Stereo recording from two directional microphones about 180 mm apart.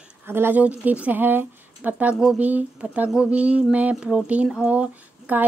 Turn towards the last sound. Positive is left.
turn(degrees=-10)  # may be behind; listen again after turning